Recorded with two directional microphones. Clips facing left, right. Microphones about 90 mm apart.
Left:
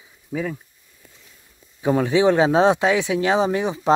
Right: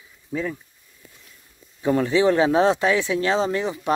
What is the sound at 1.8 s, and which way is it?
Speech, 15° left (ahead or behind).